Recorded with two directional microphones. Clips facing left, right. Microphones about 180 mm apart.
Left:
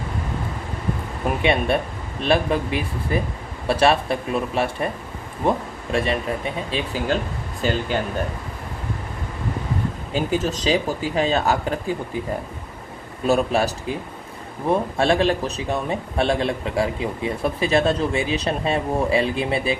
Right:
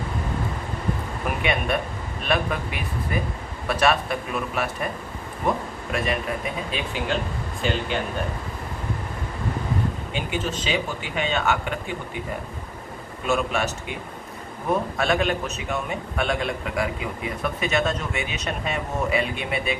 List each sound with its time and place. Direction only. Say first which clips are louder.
1.2 s a man's voice: left 6 dB; 30° left (ahead or behind)
10.1 s a man's voice: left 5 dB; 40° left (ahead or behind)
13.2 s a man's voice: left 5 dB; 35° left (ahead or behind)